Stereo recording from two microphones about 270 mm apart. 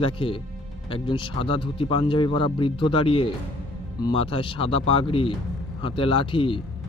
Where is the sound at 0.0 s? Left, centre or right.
Centre.